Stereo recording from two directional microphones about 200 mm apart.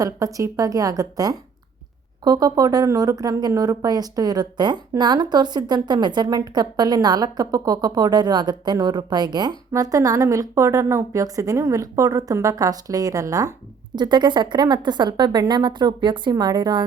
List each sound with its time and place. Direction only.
0.0 s a woman's voice: 15° right (ahead or behind)